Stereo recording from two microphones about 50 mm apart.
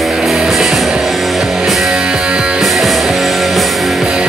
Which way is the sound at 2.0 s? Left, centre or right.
Centre.